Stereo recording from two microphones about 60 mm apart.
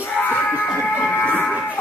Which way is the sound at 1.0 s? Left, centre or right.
Left.